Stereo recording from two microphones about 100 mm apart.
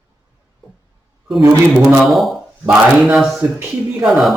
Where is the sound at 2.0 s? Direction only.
Centre (ahead or behind).